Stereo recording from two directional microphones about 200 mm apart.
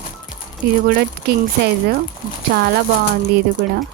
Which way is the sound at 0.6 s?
50° right (ahead or behind).